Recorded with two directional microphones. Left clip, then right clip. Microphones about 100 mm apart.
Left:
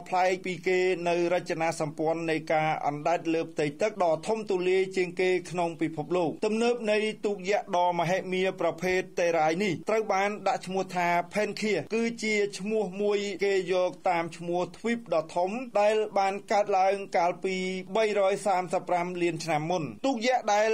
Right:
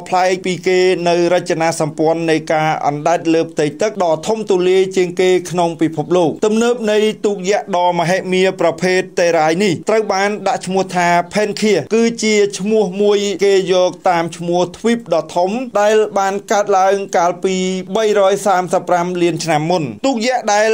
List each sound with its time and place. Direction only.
0.1 s a man's voice: 25° right (ahead or behind)